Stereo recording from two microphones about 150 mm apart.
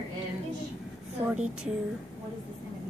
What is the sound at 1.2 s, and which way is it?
Speech, 40° right (ahead or behind).